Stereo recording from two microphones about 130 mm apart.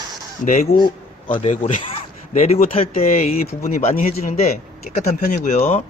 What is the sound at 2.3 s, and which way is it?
A man's voice, 55° left (ahead or behind).